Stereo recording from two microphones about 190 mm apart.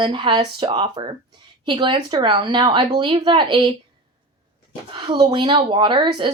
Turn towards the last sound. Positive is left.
turn(degrees=-25)  # may be behind; listen again after turning